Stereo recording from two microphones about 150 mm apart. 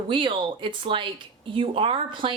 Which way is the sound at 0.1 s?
35° right (ahead or behind).